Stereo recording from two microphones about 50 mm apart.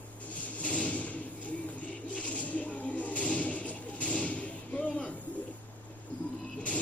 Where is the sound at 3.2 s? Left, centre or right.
Left.